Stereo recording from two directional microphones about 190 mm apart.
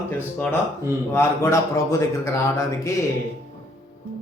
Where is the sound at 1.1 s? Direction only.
15° left (ahead or behind).